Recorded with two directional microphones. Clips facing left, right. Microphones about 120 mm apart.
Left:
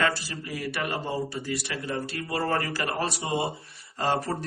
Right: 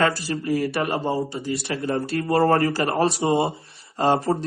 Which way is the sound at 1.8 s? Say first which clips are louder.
Right 11 dB; 45° right (ahead or behind).